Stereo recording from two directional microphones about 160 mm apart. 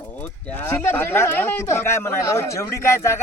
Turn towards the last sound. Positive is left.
turn(degrees=15)  # may be behind; listen again after turning